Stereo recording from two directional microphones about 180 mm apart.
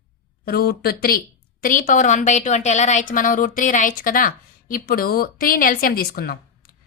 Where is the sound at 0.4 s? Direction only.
60° left (ahead or behind).